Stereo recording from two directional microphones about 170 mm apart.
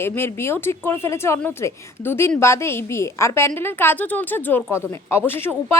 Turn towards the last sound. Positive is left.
turn(degrees=15)  # may be behind; listen again after turning